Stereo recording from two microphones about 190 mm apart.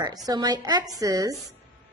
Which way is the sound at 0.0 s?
20° right (ahead or behind).